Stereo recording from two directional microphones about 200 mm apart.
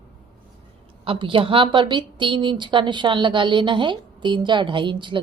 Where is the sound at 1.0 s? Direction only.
25° right (ahead or behind).